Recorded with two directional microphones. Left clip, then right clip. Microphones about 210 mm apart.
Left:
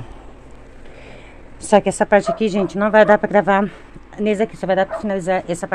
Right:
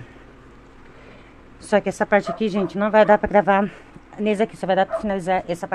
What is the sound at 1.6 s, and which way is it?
A woman's voice, 10° left (ahead or behind).